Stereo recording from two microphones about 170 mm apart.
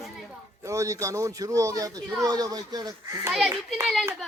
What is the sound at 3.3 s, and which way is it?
Speech, centre (ahead or behind).